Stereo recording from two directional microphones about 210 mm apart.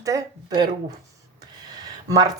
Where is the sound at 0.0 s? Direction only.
15° right (ahead or behind).